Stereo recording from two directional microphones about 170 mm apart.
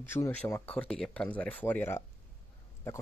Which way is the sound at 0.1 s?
15° left (ahead or behind).